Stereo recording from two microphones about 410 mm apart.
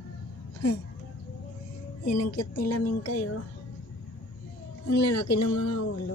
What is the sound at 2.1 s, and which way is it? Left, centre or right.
Speech, left.